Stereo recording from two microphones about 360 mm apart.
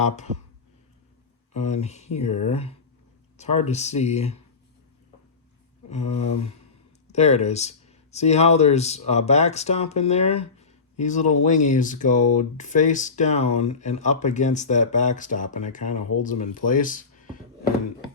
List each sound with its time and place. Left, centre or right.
1.5 s speech: centre
5.9 s speech: centre